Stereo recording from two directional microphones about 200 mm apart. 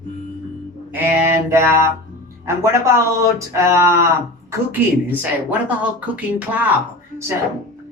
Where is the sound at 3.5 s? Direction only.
15° right (ahead or behind).